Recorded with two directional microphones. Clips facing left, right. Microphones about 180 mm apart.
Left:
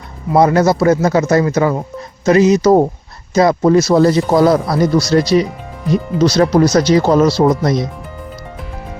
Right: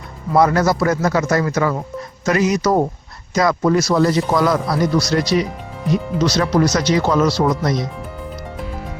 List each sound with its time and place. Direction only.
0.3 s speech: 25° left (ahead or behind)